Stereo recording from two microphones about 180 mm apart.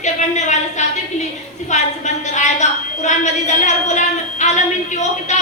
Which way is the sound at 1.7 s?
40° left (ahead or behind).